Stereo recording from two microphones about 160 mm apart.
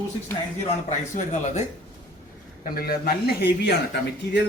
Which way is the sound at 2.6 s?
70° left (ahead or behind).